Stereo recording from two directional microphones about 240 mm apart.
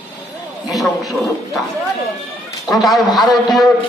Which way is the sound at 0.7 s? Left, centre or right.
Centre.